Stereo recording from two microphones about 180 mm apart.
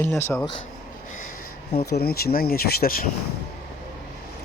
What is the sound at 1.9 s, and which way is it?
Speech, 60° left (ahead or behind).